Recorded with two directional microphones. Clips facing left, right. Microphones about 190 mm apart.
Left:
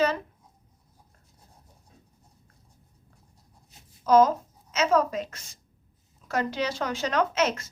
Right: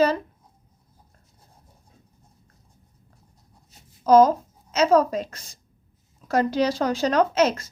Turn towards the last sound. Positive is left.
turn(degrees=-35)  # may be behind; listen again after turning